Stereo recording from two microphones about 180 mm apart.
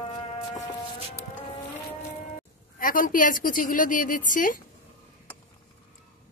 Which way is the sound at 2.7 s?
50° left (ahead or behind).